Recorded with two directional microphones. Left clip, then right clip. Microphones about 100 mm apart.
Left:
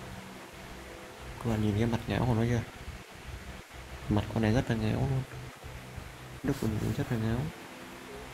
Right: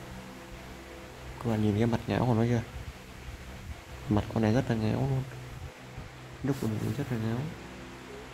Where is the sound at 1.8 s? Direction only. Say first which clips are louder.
Right 2 dB; 25° right (ahead or behind).